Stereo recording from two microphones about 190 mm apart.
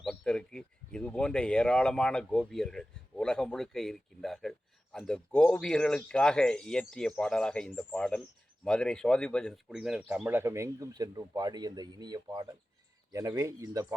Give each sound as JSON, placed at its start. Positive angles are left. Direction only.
{"t": 0.0, "sound": "speech", "side_deg": 5}
{"t": 10.2, "sound": "speech", "side_deg": -15}